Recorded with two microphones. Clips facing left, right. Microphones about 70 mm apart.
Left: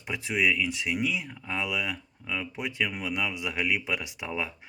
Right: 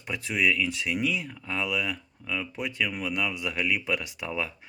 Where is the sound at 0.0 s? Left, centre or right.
Centre.